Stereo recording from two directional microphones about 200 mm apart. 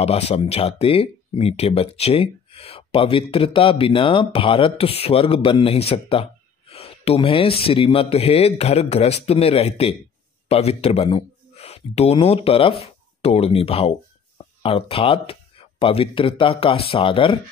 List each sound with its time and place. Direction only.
0.0 s speech: 30° left (ahead or behind)